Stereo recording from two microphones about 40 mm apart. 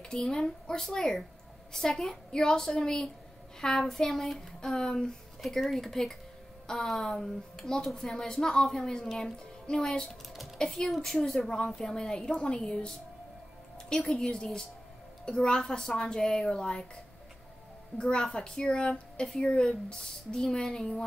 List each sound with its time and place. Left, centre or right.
0.1 s a woman's voice: centre
4.6 s a woman's voice: centre
5.5 s a woman's voice: centre
10.9 s a woman's voice: centre; by 18.2 s left
18.2 s a woman's voice: centre